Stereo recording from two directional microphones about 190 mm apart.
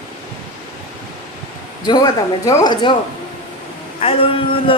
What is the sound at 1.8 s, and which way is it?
A man's voice, 20° left (ahead or behind).